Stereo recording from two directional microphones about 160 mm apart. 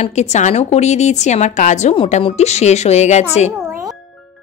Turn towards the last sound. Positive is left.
turn(degrees=45)  # may be behind; listen again after turning